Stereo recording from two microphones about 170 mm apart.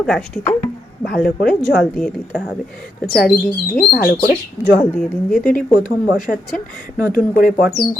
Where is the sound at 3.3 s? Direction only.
60° left (ahead or behind).